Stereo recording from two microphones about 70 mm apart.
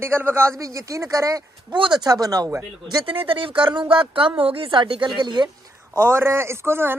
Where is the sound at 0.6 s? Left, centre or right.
Right.